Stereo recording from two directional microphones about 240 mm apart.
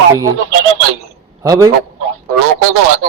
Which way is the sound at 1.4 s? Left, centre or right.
Centre.